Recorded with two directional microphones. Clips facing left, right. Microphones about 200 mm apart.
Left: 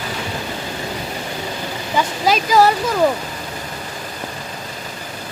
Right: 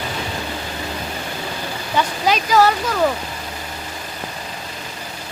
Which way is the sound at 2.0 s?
10° left (ahead or behind).